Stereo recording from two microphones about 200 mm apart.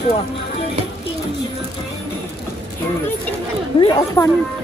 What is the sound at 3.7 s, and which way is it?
Speech, 20° left (ahead or behind).